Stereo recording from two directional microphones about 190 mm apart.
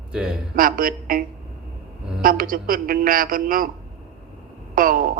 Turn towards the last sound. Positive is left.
turn(degrees=-50)  # may be behind; listen again after turning